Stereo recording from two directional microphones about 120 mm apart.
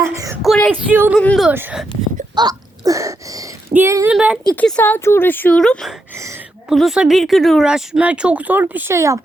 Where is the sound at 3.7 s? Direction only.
20° right (ahead or behind).